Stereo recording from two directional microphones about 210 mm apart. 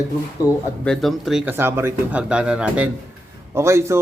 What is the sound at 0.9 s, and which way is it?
A man's voice, centre (ahead or behind).